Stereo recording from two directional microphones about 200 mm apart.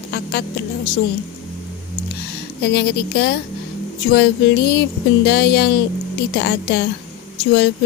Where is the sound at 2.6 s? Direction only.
55° left (ahead or behind).